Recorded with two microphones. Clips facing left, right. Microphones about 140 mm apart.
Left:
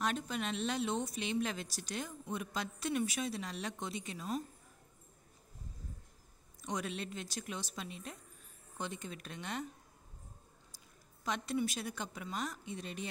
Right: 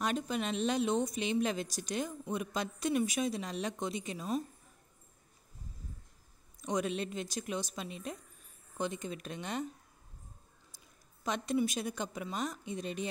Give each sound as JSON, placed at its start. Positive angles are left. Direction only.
{"t": 0.0, "sound": "a woman's voice", "side_deg": -15}
{"t": 6.6, "sound": "a woman's voice", "side_deg": -20}
{"t": 11.2, "sound": "a woman's voice", "side_deg": -20}